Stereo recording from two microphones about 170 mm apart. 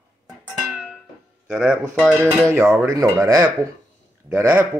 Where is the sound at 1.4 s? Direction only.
5° right (ahead or behind).